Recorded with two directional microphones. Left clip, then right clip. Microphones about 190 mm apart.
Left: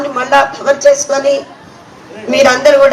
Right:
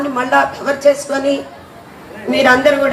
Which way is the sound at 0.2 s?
55° left (ahead or behind).